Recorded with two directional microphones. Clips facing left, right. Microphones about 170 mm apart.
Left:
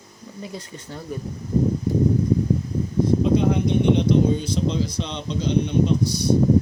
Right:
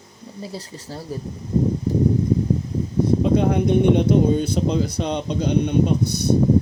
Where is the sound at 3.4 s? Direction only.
55° right (ahead or behind).